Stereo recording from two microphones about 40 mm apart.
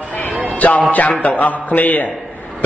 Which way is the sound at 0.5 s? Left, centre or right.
Left.